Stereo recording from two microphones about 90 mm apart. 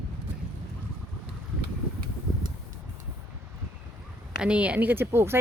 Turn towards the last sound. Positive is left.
turn(degrees=-25)  # may be behind; listen again after turning